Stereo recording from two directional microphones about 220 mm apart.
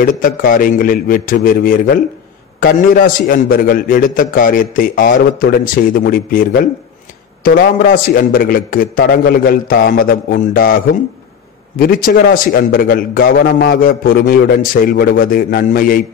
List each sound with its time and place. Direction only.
0.0 s a man's voice: 40° left (ahead or behind)
11.8 s a man's voice: 40° left (ahead or behind)